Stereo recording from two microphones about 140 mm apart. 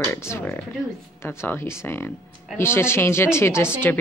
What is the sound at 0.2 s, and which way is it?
Speech, 20° left (ahead or behind).